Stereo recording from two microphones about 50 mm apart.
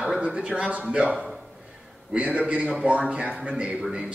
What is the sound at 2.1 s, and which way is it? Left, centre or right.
Speech, right.